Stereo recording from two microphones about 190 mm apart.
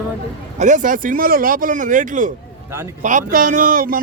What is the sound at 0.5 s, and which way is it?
Speech, 40° right (ahead or behind).